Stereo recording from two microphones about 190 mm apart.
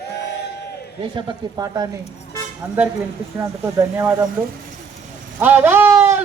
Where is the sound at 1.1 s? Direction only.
20° right (ahead or behind).